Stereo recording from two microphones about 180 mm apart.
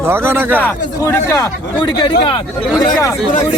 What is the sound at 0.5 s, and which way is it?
Speech, 10° left (ahead or behind).